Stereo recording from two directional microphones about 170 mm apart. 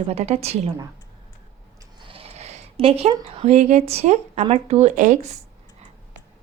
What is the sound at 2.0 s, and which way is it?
Speech, 35° right (ahead or behind).